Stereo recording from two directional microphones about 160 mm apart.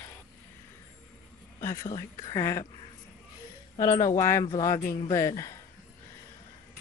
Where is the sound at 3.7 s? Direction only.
20° left (ahead or behind).